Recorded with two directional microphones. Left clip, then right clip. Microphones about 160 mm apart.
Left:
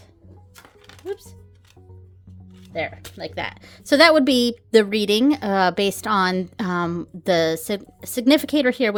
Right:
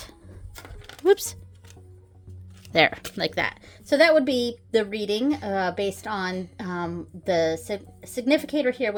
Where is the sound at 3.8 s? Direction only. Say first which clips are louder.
Left 4 dB; 55° left (ahead or behind).